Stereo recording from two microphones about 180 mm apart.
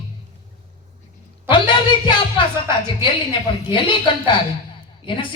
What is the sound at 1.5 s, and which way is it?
Speech, 25° left (ahead or behind).